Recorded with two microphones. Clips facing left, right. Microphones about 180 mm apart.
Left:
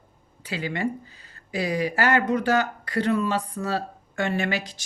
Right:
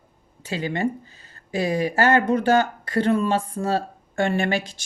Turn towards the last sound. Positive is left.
turn(degrees=-25)  # may be behind; listen again after turning